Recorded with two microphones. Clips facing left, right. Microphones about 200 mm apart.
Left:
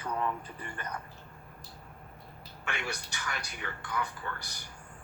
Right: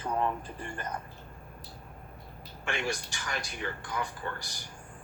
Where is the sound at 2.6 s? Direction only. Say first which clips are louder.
Right 5 dB; 35° right (ahead or behind).